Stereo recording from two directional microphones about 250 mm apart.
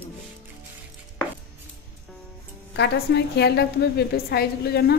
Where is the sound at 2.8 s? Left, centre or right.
Left.